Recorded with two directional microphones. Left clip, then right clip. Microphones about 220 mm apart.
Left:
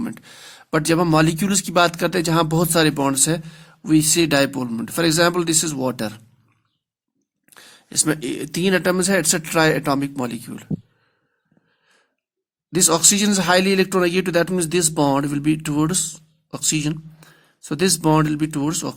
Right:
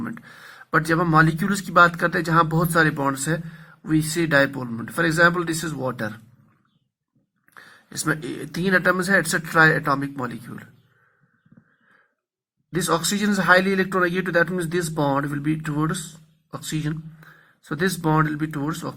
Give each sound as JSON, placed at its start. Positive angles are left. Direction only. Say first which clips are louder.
{"t": 0.0, "sound": "speech", "louder": "left 3 dB", "side_deg": 35}
{"t": 7.5, "sound": "speech", "louder": "left 10 dB", "side_deg": 30}
{"t": 12.7, "sound": "speech", "louder": "left 5 dB", "side_deg": 35}